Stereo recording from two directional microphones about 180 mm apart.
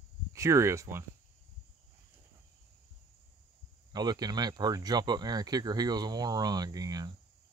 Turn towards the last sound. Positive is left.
turn(degrees=-20)  # may be behind; listen again after turning